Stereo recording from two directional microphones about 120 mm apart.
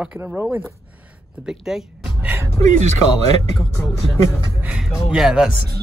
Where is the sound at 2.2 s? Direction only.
20° right (ahead or behind).